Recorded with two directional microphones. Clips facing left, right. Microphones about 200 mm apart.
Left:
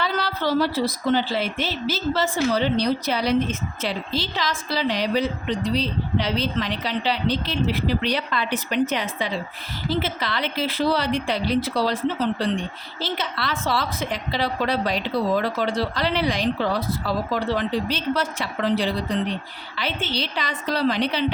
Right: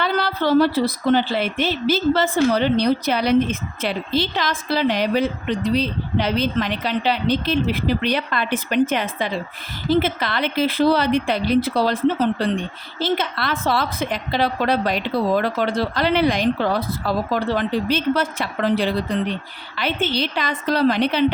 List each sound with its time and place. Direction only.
0.0 s a woman's voice: 60° right (ahead or behind)